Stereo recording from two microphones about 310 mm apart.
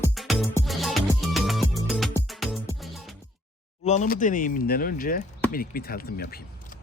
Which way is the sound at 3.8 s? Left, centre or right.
Left.